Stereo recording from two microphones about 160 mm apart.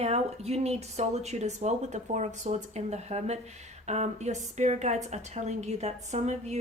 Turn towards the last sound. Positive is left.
turn(degrees=-45)  # may be behind; listen again after turning